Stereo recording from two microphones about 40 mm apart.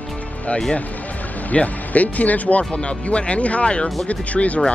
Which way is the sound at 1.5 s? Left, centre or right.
Left.